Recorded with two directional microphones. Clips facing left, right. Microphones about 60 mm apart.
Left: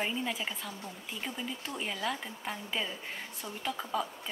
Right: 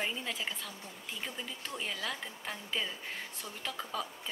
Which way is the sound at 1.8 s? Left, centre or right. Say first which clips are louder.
Left 3 dB; centre.